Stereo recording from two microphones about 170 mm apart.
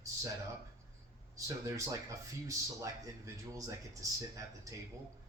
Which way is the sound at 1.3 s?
20° right (ahead or behind).